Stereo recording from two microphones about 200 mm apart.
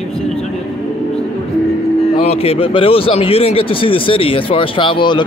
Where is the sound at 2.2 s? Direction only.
30° left (ahead or behind).